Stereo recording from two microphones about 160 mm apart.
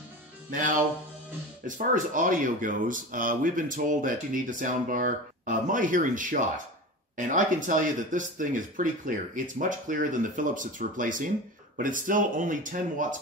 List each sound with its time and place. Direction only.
0.5 s speech: 55° right (ahead or behind)